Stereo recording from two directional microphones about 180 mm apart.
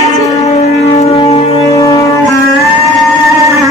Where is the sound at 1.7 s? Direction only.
20° left (ahead or behind).